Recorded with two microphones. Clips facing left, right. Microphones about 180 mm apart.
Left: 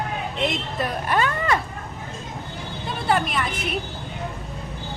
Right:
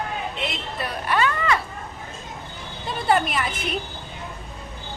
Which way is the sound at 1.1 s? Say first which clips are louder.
Right 1 dB; 45° left (ahead or behind).